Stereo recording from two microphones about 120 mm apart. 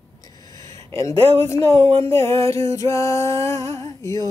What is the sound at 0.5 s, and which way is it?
Speech, 25° left (ahead or behind).